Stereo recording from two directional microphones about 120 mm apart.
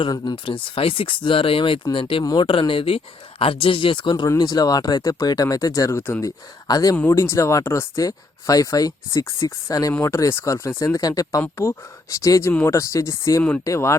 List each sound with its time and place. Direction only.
0.0 s speech: 40° left (ahead or behind)
2.2 s speech: 35° left (ahead or behind)
2.5 s speech: 45° left (ahead or behind); by 6.0 s 30° left (ahead or behind)
6.0 s speech: 15° left (ahead or behind)
6.2 s speech: 30° left (ahead or behind)
6.9 s speech: 20° left (ahead or behind)